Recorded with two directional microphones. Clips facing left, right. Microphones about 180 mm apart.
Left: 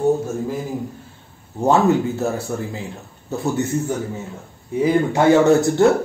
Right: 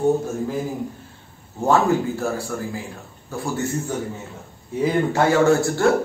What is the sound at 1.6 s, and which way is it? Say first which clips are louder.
Speech: left 2 dB; 20° left (ahead or behind).